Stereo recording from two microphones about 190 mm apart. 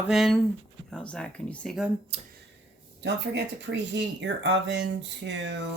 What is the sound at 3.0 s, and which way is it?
Speech, 65° right (ahead or behind).